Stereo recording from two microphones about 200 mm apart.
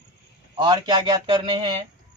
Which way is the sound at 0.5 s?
25° right (ahead or behind).